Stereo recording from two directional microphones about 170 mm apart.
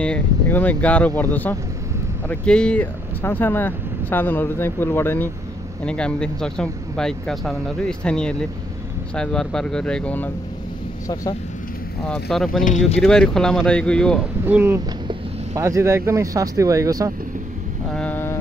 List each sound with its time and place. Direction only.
0.0 s speech: 10° left (ahead or behind)
12.1 s speech: centre (ahead or behind)
12.6 s speech: 45° left (ahead or behind)
13.0 s speech: 5° left (ahead or behind)
14.4 s speech: 10° right (ahead or behind)
17.9 s vehicle: 10° left (ahead or behind)